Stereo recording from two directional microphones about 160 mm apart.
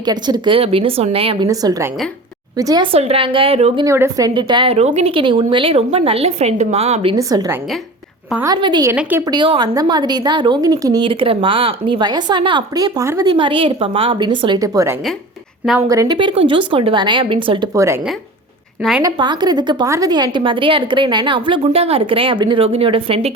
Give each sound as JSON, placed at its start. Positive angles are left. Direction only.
{"t": 0.0, "sound": "a woman's voice", "side_deg": -25}
{"t": 1.5, "sound": "a woman's voice", "side_deg": -20}
{"t": 3.8, "sound": "a woman's voice", "side_deg": -15}
{"t": 4.4, "sound": "a woman's voice", "side_deg": -30}
{"t": 7.2, "sound": "a woman's voice", "side_deg": -20}
{"t": 8.6, "sound": "a woman's voice", "side_deg": -30}
{"t": 8.9, "sound": "a woman's voice", "side_deg": -15}
{"t": 9.2, "sound": "a woman's voice", "side_deg": -30}
{"t": 13.3, "sound": "a woman's voice", "side_deg": -30}
{"t": 16.1, "sound": "a woman's voice", "side_deg": -35}
{"t": 17.7, "sound": "a woman's voice", "side_deg": -20}
{"t": 18.8, "sound": "a woman's voice", "side_deg": 0}
{"t": 19.0, "sound": "a woman's voice", "side_deg": -30}